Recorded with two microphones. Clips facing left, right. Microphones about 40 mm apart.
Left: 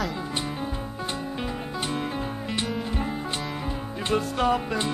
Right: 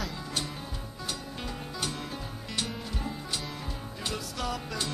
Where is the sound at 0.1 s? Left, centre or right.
Left.